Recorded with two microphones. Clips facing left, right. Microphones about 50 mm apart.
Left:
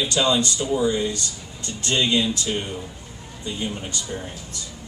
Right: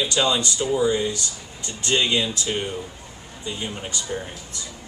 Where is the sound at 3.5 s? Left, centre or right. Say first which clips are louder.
Left 1 dB; centre.